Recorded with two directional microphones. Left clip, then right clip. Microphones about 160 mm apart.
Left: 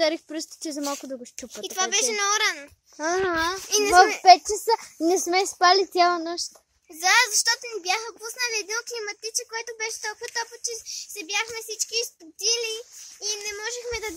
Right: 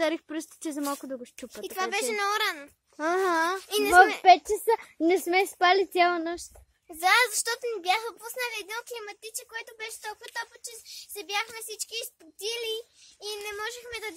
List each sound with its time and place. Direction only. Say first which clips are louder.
0.0 s speech: left 4 dB; 5° right (ahead or behind)
3.0 s speech: left 2 dB; 5° right (ahead or behind)
3.3 s speech: left 2 dB; 30° right (ahead or behind); by 6.3 s 10° right (ahead or behind)
7.0 s a child's voice: left 3 dB; 40° right (ahead or behind)
10.7 s a child's voice: left 9 dB; 40° right (ahead or behind)